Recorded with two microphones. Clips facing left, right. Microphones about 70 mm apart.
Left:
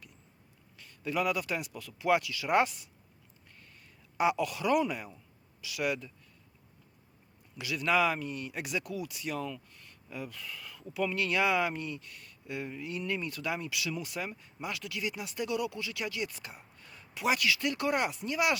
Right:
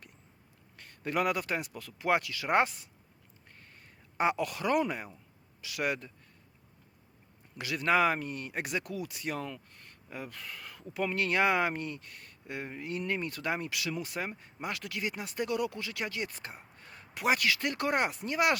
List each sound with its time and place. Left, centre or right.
0.8 s speech: right
3.5 s a sound: right
5.6 s speech: right
7.5 s speech: right